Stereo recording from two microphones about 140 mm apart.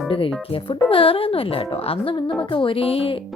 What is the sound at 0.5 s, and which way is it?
A woman's voice, 40° left (ahead or behind).